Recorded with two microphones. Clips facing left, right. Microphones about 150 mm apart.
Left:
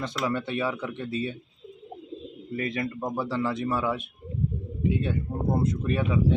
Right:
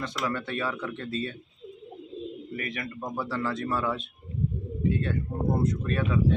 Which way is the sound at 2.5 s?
30° left (ahead or behind).